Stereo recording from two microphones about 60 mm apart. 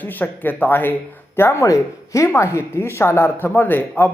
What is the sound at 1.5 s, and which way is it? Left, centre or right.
Speech, left.